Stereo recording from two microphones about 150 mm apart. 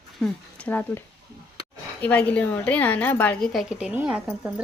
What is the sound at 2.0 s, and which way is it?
A woman's voice, 10° left (ahead or behind).